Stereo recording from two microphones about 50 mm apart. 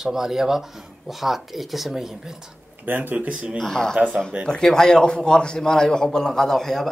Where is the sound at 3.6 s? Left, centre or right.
Centre.